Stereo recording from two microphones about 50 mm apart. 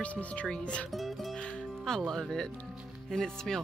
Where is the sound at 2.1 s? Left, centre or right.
Centre.